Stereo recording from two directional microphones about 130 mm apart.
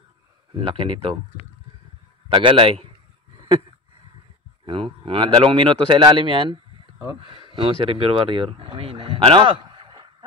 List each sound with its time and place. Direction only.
0.6 s speech: 45° right (ahead or behind)
2.3 s speech: 40° right (ahead or behind)
4.6 s speech: 45° right (ahead or behind)